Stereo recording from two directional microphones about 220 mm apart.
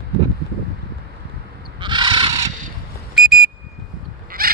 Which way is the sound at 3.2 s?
Centre (ahead or behind).